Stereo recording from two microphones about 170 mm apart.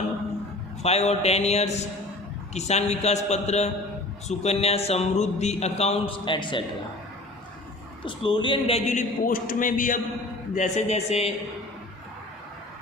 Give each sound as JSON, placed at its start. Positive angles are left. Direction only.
{"t": 0.8, "sound": "speech", "side_deg": 40}
{"t": 8.0, "sound": "a man's voice", "side_deg": 30}
{"t": 10.5, "sound": "speech", "side_deg": 45}